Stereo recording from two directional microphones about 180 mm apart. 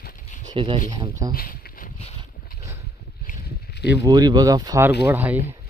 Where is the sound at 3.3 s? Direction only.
65° left (ahead or behind).